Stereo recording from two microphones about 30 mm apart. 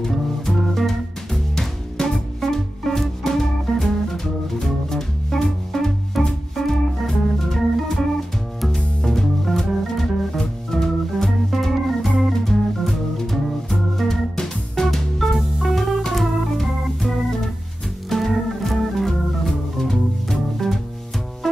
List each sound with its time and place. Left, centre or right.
0.1 s music: centre
6.5 s organ: centre
8.7 s music: centre
10.7 s organ: centre
14.4 s music: centre
16.1 s organ: centre
18.1 s organ: centre
19.4 s music: centre